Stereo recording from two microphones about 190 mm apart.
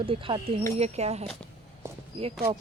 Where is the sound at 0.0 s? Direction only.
30° right (ahead or behind).